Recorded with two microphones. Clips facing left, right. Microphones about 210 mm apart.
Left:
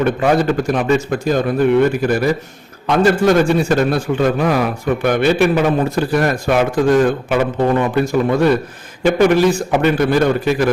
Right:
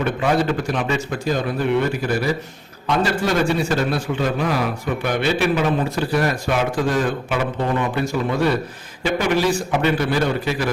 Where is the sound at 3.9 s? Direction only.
50° left (ahead or behind).